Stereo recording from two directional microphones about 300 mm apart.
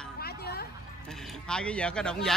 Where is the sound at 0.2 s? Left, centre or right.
Left.